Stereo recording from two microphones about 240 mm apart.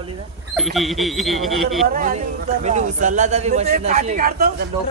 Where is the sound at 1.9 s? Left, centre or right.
Right.